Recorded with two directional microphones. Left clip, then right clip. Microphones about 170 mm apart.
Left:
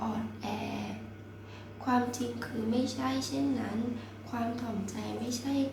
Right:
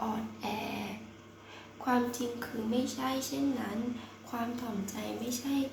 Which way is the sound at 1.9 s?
15° right (ahead or behind).